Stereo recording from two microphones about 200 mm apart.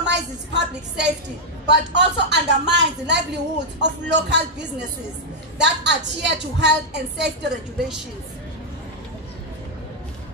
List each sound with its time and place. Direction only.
0.0 s a woman's voice: 60° right (ahead or behind)